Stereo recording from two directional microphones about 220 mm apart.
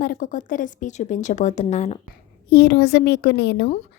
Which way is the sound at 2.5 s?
45° left (ahead or behind).